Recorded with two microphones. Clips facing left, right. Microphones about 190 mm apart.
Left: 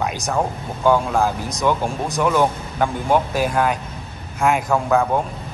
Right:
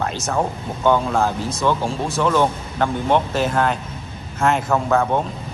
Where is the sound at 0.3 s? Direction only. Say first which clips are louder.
Right 1 dB; 10° left (ahead or behind).